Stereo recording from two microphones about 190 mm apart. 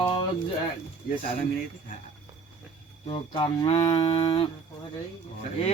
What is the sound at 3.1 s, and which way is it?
Livestock, 25° left (ahead or behind).